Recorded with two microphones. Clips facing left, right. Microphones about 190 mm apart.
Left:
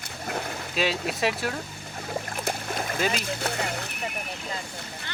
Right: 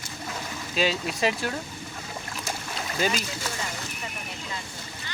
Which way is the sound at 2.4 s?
50° left (ahead or behind).